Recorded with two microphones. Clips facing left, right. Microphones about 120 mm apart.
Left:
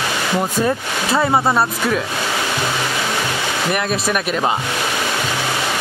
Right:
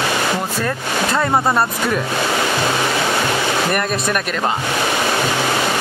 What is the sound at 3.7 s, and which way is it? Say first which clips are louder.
Speech: even; centre (ahead or behind).